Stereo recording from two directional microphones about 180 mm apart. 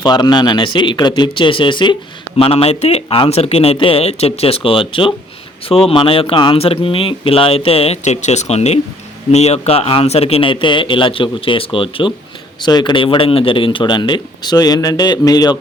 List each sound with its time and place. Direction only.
0.0 s a man's voice: 25° left (ahead or behind)